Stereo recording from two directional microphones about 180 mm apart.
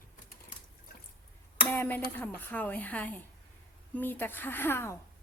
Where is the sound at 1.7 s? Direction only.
10° left (ahead or behind).